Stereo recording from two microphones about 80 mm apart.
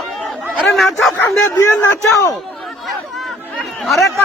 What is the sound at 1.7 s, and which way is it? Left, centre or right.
Speech, left.